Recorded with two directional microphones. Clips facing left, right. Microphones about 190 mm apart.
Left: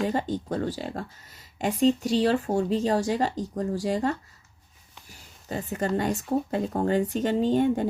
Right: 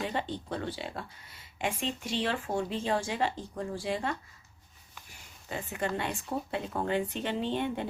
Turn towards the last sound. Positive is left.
turn(degrees=45)  # may be behind; listen again after turning